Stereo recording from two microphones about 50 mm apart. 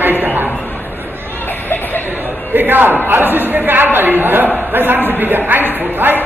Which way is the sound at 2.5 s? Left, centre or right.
Right.